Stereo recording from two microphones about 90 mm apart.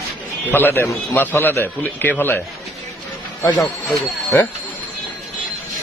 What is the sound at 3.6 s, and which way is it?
Speech, centre (ahead or behind).